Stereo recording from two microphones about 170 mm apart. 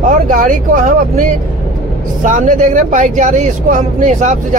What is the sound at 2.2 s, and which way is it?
A man's voice, 50° right (ahead or behind).